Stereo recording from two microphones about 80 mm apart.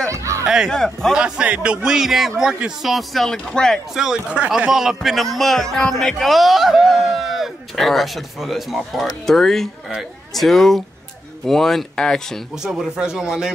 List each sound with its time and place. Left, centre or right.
0.1 s a sound: right
0.7 s a man's voice: centre
1.1 s a man's voice: centre
3.9 s a man's voice: centre
12.6 s a man's voice: centre